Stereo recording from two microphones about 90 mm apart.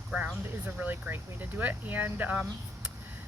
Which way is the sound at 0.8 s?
20° right (ahead or behind).